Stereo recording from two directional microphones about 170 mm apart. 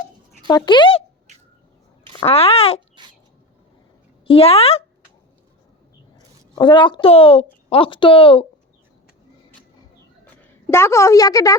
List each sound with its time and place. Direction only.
0.4 s speech: 25° left (ahead or behind)
2.1 s a child's voice: 35° left (ahead or behind)
4.3 s speech: 35° left (ahead or behind)
6.1 s a woman's voice: 25° left (ahead or behind)
10.4 s a woman's voice: 15° left (ahead or behind)